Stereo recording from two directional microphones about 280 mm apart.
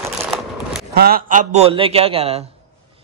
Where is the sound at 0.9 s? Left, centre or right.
Right.